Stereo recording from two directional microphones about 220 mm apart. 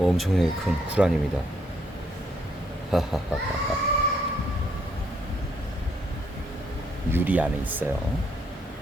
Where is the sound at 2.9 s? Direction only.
Centre (ahead or behind).